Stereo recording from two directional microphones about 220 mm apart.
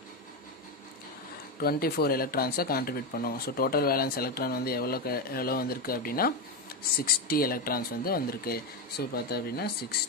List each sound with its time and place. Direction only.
1.6 s speech: 45° left (ahead or behind)